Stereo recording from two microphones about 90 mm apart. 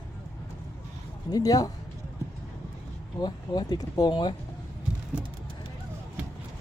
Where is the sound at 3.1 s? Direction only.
50° left (ahead or behind).